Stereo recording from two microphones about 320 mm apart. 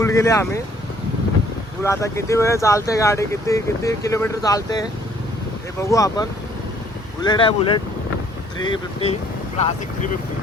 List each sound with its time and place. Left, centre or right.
0.0 s speech: centre
1.8 s speech: centre